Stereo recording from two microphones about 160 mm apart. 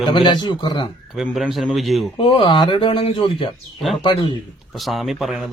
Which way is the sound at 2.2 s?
30° left (ahead or behind).